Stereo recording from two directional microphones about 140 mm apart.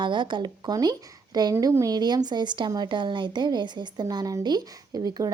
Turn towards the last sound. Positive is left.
turn(degrees=-25)  # may be behind; listen again after turning